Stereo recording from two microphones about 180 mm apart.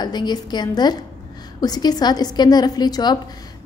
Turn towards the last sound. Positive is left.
turn(degrees=25)  # may be behind; listen again after turning